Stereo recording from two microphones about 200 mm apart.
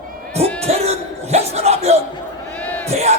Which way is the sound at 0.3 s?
30° right (ahead or behind).